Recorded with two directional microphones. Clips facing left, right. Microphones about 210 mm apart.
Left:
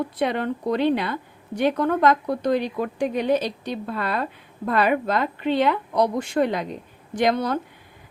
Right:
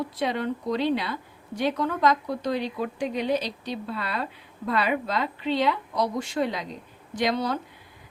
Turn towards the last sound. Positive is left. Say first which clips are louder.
# left 4 dB
turn(degrees=50)  # may be behind; listen again after turning